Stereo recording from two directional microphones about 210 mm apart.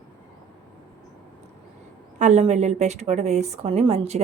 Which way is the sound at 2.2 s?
30° right (ahead or behind).